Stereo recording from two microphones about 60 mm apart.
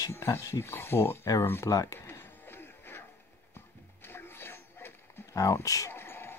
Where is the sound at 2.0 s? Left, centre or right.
Left.